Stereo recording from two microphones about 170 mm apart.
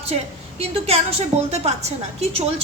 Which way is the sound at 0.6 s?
35° right (ahead or behind).